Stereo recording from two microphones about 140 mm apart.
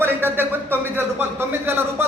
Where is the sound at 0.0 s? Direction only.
15° right (ahead or behind).